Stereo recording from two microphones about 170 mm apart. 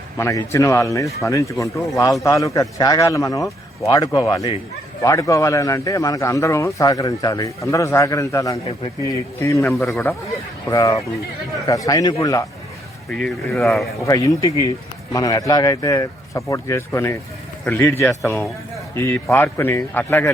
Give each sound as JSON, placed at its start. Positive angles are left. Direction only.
{"t": 0.2, "sound": "a man's voice", "side_deg": 15}
{"t": 13.1, "sound": "speech", "side_deg": 5}
{"t": 14.0, "sound": "a man's voice", "side_deg": 20}